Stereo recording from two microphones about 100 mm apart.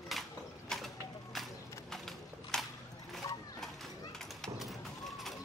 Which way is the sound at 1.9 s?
5° left (ahead or behind).